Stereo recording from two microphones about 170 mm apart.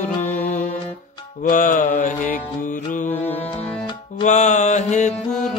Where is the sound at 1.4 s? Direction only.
50° left (ahead or behind).